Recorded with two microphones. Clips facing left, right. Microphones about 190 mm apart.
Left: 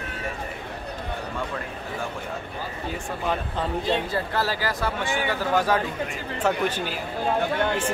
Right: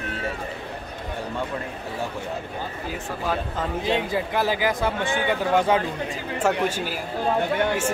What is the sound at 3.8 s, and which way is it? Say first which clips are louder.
A man's voice: right 4 dB; 15° right (ahead or behind).